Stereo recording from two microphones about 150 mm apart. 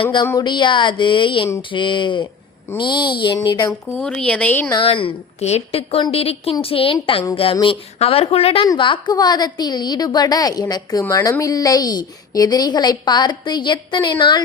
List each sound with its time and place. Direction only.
0.0 s a woman's voice: 30° left (ahead or behind)
3.9 s speech: 5° left (ahead or behind)
4.7 s a woman's voice: 35° left (ahead or behind)
8.6 s a woman's voice: 30° left (ahead or behind)